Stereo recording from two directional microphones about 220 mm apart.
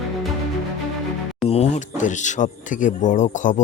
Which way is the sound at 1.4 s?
25° left (ahead or behind).